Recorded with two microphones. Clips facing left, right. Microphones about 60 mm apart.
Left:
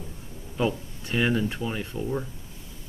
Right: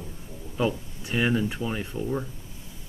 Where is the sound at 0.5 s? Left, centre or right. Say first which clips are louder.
Even; centre.